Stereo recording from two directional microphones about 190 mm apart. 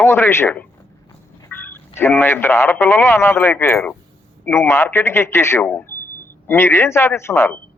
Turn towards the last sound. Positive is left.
turn(degrees=15)  # may be behind; listen again after turning